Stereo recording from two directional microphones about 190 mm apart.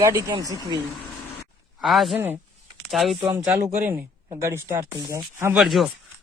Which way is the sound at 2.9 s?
Centre (ahead or behind).